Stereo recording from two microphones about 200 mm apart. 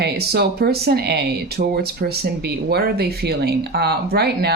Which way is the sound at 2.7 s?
55° right (ahead or behind).